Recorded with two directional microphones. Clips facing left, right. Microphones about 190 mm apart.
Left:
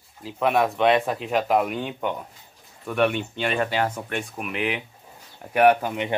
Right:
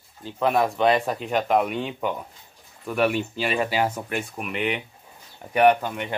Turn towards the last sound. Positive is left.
turn(degrees=20)  # may be behind; listen again after turning